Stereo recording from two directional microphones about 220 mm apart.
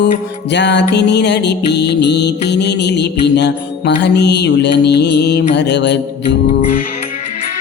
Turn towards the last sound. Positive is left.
turn(degrees=50)  # may be behind; listen again after turning